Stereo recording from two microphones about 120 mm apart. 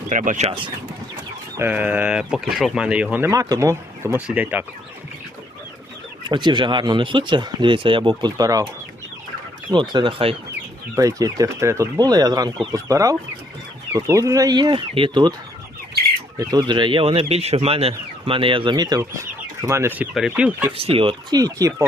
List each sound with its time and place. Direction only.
0.1 s speech: 90° right
1.5 s speech: 15° right (ahead or behind)
3.3 s speech: 30° right (ahead or behind)
4.3 s speech: 15° right (ahead or behind)
6.2 s speech: 40° right (ahead or behind)
9.9 s speech: 45° right (ahead or behind)
10.9 s speech: 30° right (ahead or behind)
16.4 s speech: 35° right (ahead or behind)
19.6 s speech: 25° right (ahead or behind)
20.7 s speech: 55° right (ahead or behind)
21.3 s speech: 30° right (ahead or behind)